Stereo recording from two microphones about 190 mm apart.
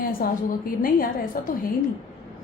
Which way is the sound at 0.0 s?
50° left (ahead or behind).